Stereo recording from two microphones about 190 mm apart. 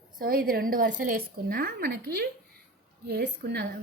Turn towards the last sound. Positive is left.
turn(degrees=-60)  # may be behind; listen again after turning